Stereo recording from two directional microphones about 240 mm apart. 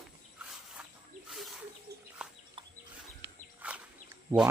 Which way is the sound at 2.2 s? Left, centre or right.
Centre.